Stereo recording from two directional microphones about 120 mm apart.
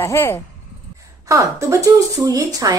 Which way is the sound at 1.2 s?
25° right (ahead or behind).